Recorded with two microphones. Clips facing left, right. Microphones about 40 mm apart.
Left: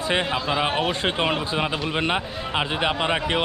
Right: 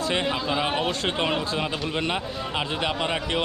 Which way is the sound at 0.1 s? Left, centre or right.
Centre.